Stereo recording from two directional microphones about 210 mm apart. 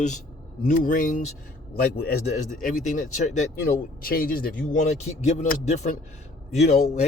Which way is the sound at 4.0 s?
45° left (ahead or behind).